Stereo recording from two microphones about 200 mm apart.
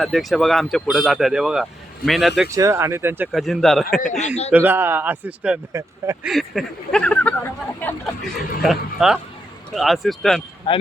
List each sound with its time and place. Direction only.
0.0 s speech: centre (ahead or behind)
2.5 s speech: 15° right (ahead or behind)
3.3 s speech: centre (ahead or behind)
4.0 s speech: 35° left (ahead or behind)
4.5 s speech: 10° right (ahead or behind)
10.7 s speech: 25° left (ahead or behind)